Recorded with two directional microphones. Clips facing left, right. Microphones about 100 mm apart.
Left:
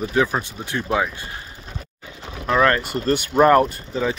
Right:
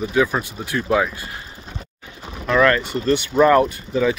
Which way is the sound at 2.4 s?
30° left (ahead or behind).